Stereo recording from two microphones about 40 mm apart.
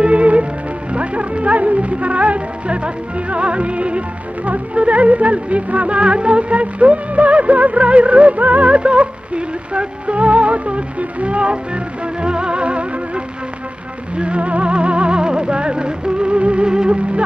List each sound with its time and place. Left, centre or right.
0.0 s music: right